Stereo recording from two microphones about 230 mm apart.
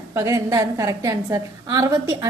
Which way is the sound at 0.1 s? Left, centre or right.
Centre.